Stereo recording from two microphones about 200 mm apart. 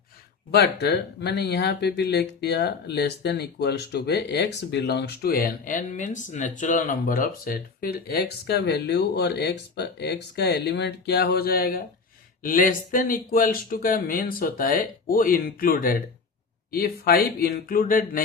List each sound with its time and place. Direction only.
0.5 s speech: 55° left (ahead or behind)